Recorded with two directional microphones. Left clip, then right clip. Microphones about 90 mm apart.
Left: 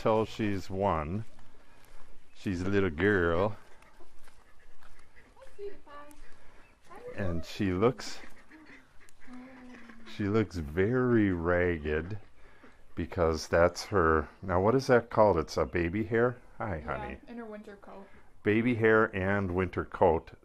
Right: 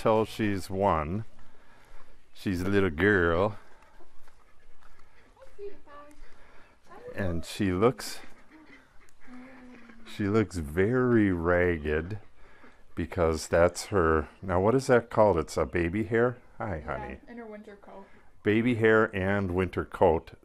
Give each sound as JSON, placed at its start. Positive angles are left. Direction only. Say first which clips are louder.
{"t": 0.0, "sound": "speech", "louder": "right 3 dB", "side_deg": -30}
{"t": 2.3, "sound": "speech", "louder": "right 3 dB", "side_deg": -30}
{"t": 5.9, "sound": "a sound", "louder": "even", "side_deg": 20}
{"t": 7.2, "sound": "speech", "louder": "right 3 dB", "side_deg": -30}
{"t": 9.3, "sound": "a sound", "louder": "right 1 dB", "side_deg": -25}
{"t": 10.0, "sound": "speech", "louder": "right 3 dB", "side_deg": -30}
{"t": 17.3, "sound": "a woman's voice", "louder": "even", "side_deg": 30}
{"t": 18.4, "sound": "speech", "louder": "right 2 dB", "side_deg": -25}